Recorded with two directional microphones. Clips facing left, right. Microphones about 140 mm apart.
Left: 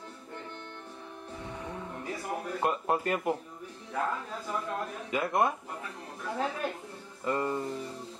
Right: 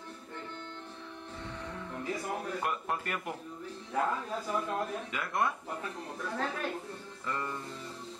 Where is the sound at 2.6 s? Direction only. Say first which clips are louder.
Left 5 dB; 30° left (ahead or behind).